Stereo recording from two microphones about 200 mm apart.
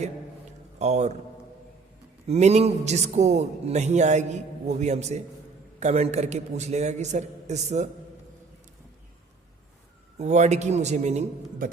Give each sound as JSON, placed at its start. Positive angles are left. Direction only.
{"t": 0.8, "sound": "a man's voice", "side_deg": -35}
{"t": 2.2, "sound": "a man's voice", "side_deg": -30}
{"t": 10.2, "sound": "a man's voice", "side_deg": -35}